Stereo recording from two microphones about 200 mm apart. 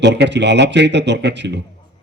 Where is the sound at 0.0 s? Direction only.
60° right (ahead or behind).